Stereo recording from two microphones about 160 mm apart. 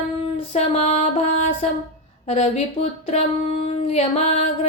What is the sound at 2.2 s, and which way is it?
Mantra, 40° left (ahead or behind).